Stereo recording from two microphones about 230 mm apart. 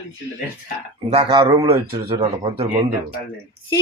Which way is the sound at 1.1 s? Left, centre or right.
Right.